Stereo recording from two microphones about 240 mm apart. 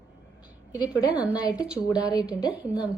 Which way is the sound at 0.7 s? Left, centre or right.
Centre.